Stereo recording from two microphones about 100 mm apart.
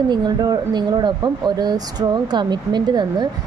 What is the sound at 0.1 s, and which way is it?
Speech, 45° right (ahead or behind).